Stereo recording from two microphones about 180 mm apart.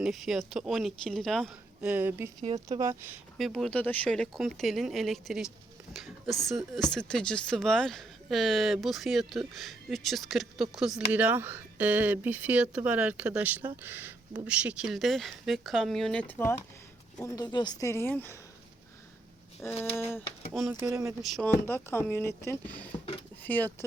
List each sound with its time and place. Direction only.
0.0 s speech: centre (ahead or behind)
3.3 s speech: centre (ahead or behind)
19.6 s speech: 15° left (ahead or behind)
20.5 s speech: centre (ahead or behind)
20.8 s speech: 15° right (ahead or behind)
21.2 s speech: centre (ahead or behind)
21.7 s speech: 10° left (ahead or behind)